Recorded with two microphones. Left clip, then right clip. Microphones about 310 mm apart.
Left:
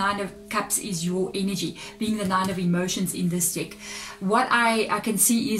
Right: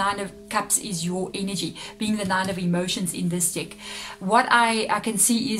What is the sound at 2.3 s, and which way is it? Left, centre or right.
Speech, right.